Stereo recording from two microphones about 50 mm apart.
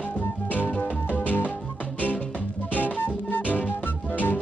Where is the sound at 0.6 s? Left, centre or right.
Left.